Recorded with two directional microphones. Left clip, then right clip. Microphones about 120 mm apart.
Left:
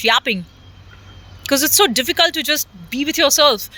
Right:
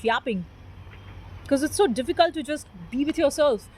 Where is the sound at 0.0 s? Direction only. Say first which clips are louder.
Left 9 dB; 25° left (ahead or behind).